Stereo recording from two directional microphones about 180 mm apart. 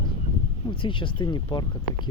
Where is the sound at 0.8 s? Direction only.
25° left (ahead or behind).